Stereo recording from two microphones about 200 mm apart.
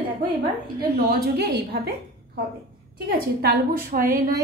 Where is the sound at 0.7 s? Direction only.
50° right (ahead or behind).